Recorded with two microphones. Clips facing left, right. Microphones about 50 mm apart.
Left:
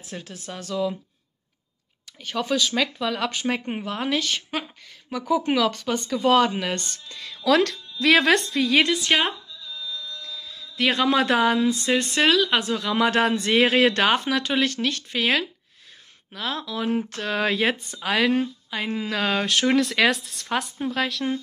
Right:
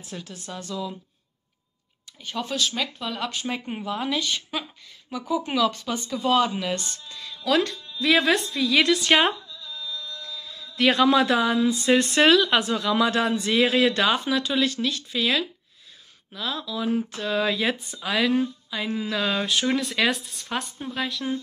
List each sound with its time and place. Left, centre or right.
0.1 s speech: left
2.2 s speech: left
8.5 s speech: left
9.0 s speech: centre
11.1 s speech: left
12.2 s speech: centre
12.8 s speech: left
18.4 s speech: left